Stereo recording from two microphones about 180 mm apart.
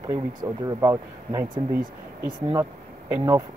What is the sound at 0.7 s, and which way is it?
Speech, 15° right (ahead or behind).